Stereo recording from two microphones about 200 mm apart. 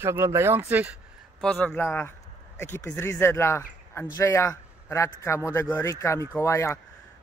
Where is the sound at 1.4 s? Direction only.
5° left (ahead or behind).